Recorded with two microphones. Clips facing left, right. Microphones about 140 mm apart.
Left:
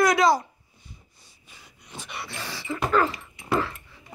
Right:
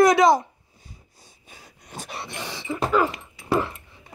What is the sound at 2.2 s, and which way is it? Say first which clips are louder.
Dog: even; 15° right (ahead or behind).